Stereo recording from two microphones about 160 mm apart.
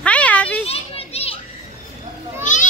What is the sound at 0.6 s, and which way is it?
Children playing, 40° left (ahead or behind).